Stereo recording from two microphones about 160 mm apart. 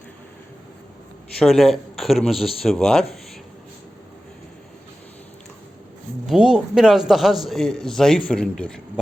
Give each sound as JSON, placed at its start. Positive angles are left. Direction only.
{"t": 1.4, "sound": "a man's voice", "side_deg": 0}
{"t": 6.2, "sound": "a man's voice", "side_deg": -5}